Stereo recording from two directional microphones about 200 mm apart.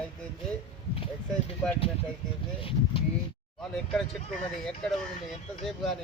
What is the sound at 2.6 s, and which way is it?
Speech, 25° left (ahead or behind).